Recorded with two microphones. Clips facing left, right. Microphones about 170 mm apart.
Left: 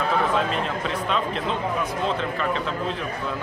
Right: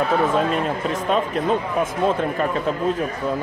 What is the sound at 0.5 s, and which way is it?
Speech, 45° right (ahead or behind).